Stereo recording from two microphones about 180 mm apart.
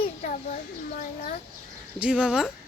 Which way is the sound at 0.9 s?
50° left (ahead or behind).